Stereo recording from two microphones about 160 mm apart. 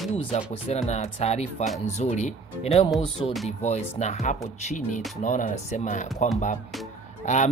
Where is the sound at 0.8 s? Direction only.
45° left (ahead or behind).